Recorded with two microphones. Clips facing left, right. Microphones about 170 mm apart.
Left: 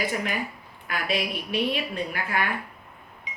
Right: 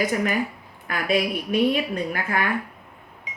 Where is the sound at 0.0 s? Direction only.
45° right (ahead or behind).